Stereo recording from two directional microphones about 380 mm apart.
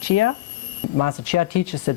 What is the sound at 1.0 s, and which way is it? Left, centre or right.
Speech, left.